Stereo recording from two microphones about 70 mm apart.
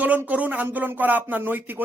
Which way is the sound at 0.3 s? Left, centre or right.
Right.